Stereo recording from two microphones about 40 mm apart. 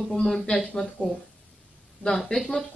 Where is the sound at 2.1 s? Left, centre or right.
Centre.